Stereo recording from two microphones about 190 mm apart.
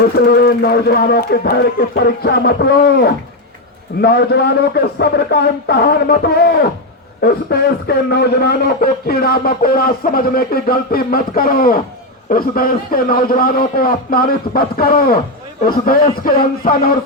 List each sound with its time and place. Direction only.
0.3 s a man's voice: 55° left (ahead or behind)